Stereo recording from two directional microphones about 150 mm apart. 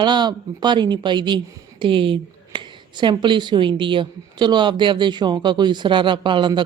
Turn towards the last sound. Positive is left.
turn(degrees=-30)  # may be behind; listen again after turning